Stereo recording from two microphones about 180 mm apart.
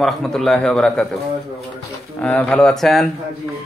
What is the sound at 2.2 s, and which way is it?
Speech, 10° left (ahead or behind).